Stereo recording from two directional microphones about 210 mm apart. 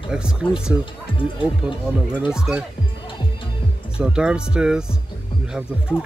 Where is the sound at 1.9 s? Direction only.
5° right (ahead or behind).